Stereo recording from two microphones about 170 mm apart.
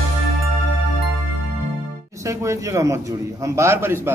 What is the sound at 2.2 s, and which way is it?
A man's voice, 15° right (ahead or behind).